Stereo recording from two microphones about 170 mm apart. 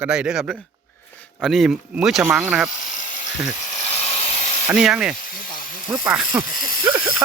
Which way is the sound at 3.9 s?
40° left (ahead or behind).